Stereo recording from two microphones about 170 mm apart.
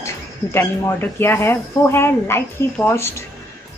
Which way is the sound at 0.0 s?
15° left (ahead or behind).